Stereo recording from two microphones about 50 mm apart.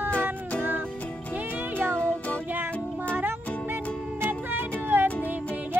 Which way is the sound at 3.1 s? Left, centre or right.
Right.